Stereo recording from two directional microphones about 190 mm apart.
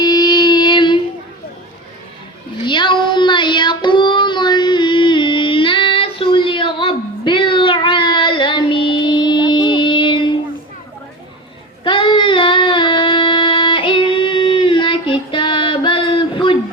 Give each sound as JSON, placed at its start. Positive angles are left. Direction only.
{"t": 0.0, "sound": "child singing", "side_deg": 20}
{"t": 2.6, "sound": "child singing", "side_deg": 25}
{"t": 11.8, "sound": "music", "side_deg": 25}